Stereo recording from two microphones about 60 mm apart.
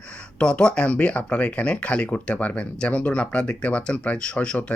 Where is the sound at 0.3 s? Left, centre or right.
Centre.